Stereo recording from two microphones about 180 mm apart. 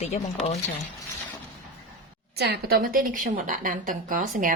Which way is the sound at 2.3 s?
65° right (ahead or behind).